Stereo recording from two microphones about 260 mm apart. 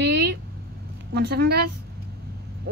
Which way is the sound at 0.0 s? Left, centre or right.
Right.